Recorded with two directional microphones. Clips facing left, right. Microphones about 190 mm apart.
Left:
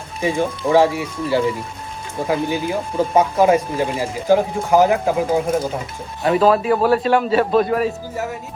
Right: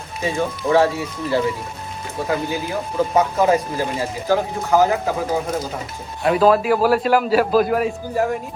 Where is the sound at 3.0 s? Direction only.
15° left (ahead or behind).